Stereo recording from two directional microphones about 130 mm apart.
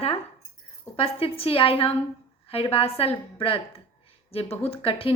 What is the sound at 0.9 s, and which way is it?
A woman's voice, 50° left (ahead or behind).